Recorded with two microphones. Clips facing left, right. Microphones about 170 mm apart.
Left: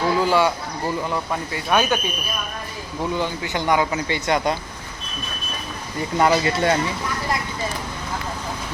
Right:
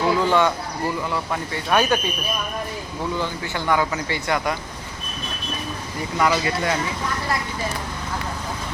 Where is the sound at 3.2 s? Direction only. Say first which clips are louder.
Left 2 dB; 15° left (ahead or behind).